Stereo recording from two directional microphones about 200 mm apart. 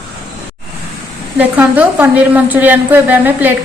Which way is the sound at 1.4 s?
10° right (ahead or behind).